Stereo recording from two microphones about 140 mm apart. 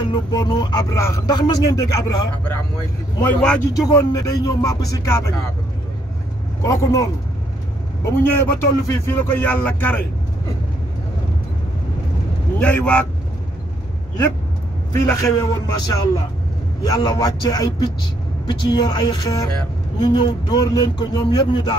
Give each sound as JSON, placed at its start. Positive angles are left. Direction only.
{"t": 0.0, "sound": "speech", "side_deg": 30}
{"t": 3.2, "sound": "a man's voice", "side_deg": 10}
{"t": 3.9, "sound": "speech", "side_deg": 25}
{"t": 6.6, "sound": "a man's voice", "side_deg": 25}
{"t": 12.5, "sound": "a man's voice", "side_deg": 10}
{"t": 14.9, "sound": "speech", "side_deg": 20}